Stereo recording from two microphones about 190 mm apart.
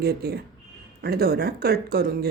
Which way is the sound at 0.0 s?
55° right (ahead or behind).